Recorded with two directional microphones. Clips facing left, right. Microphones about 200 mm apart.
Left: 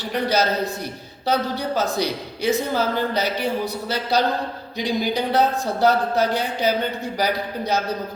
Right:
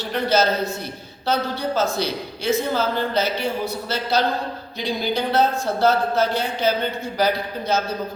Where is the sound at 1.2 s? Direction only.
15° left (ahead or behind).